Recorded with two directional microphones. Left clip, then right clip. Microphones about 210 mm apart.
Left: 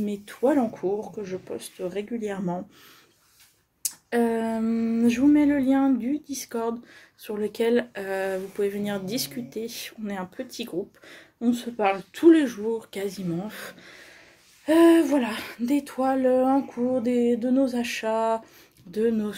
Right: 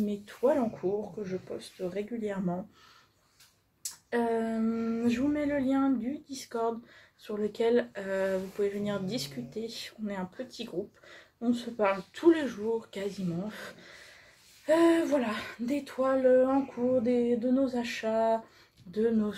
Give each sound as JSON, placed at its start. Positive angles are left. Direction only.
{"t": 0.0, "sound": "speech", "side_deg": 50}
{"t": 3.8, "sound": "speech", "side_deg": 50}